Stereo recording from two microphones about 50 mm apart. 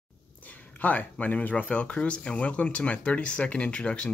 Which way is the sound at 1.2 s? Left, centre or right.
Left.